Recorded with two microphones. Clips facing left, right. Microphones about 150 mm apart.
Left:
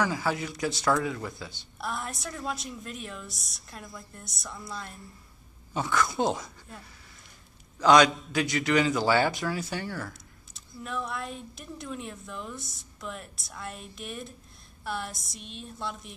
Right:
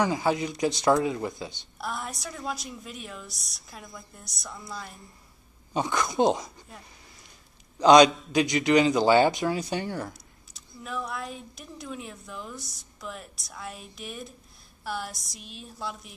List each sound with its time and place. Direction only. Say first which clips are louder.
0.0 s speech: right 3 dB; 20° right (ahead or behind)
1.8 s speech: even; centre (ahead or behind)
5.7 s speech: even; 20° right (ahead or behind)
7.8 s speech: right 4 dB; 20° right (ahead or behind)
10.5 s speech: even; centre (ahead or behind)